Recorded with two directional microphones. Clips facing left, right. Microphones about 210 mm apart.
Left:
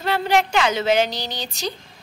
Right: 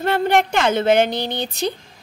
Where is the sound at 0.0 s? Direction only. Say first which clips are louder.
Right 3 dB; 50° right (ahead or behind).